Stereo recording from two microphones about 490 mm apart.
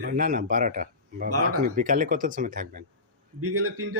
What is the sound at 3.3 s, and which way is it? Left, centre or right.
Speech, right.